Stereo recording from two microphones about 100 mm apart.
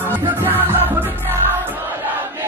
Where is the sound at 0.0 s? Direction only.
20° right (ahead or behind).